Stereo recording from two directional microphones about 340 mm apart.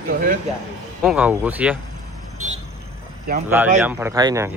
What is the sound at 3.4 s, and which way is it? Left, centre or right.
Speech, centre.